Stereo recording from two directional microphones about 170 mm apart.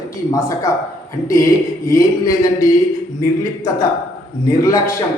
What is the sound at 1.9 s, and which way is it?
Speech, 20° left (ahead or behind).